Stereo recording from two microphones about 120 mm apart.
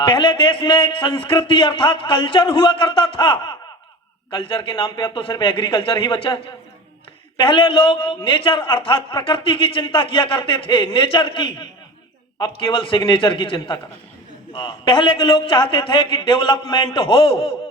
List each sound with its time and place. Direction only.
0.0 s a man's voice: 40° left (ahead or behind)